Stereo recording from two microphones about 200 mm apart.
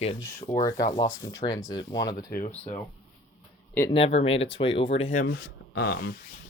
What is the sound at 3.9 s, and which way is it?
Speech, 30° left (ahead or behind).